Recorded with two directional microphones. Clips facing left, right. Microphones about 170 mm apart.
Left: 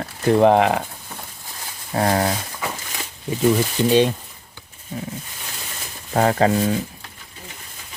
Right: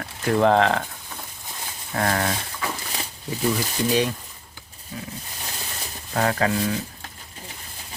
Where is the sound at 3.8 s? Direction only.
25° left (ahead or behind).